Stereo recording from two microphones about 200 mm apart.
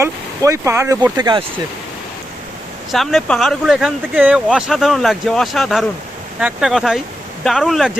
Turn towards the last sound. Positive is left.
turn(degrees=0)  # may be behind; listen again after turning